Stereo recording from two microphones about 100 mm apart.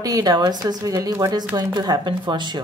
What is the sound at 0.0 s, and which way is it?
Speech, 40° right (ahead or behind).